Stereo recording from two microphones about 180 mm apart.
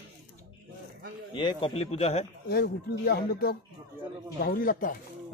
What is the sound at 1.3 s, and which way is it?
Speech, 25° left (ahead or behind).